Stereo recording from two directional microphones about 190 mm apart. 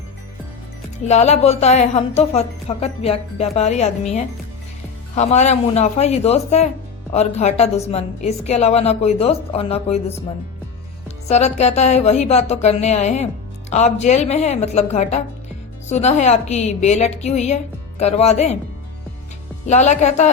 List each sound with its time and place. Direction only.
1.0 s speech: 35° left (ahead or behind)
11.3 s speech: 35° left (ahead or behind)
19.6 s speech: 40° left (ahead or behind)